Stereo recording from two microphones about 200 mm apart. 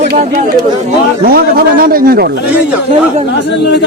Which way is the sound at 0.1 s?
50° right (ahead or behind).